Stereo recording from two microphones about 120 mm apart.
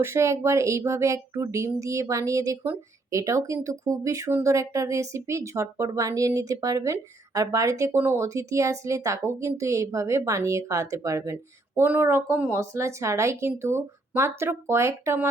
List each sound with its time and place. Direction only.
0.0 s speech: 25° right (ahead or behind)